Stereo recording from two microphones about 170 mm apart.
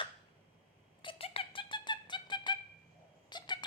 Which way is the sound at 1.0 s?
30° left (ahead or behind).